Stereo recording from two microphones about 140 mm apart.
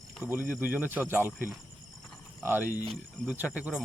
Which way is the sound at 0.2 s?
15° right (ahead or behind).